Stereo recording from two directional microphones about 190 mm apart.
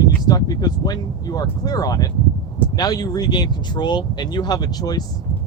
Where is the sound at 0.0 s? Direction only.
20° left (ahead or behind).